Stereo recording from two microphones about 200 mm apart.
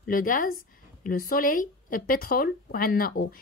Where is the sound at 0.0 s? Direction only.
45° left (ahead or behind).